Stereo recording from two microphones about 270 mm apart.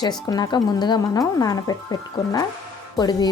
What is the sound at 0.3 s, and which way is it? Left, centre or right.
Speech, centre.